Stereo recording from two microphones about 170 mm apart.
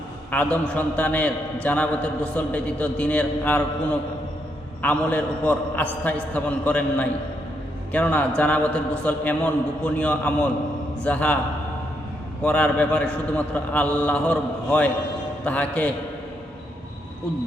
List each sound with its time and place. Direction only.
0.3 s a man's voice: 10° left (ahead or behind)
12.4 s a man's voice: 5° left (ahead or behind)